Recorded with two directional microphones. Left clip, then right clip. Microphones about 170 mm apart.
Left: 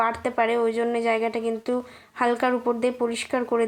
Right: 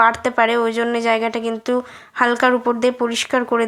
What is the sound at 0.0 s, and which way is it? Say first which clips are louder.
Speech: right 8 dB; 25° right (ahead or behind).